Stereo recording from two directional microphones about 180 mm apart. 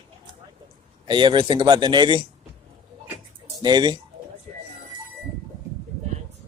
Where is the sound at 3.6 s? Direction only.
25° right (ahead or behind).